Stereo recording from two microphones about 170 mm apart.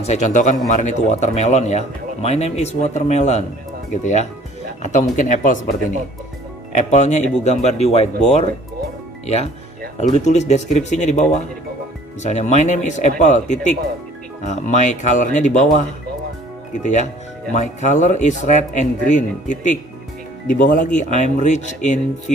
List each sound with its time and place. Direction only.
0.0 s a man's voice: 40° left (ahead or behind)
6.7 s a man's voice: 40° left (ahead or behind)
14.4 s speech: 45° left (ahead or behind)
16.7 s speech: 45° left (ahead or behind)